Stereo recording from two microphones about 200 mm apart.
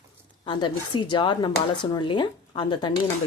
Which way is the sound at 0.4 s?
25° left (ahead or behind).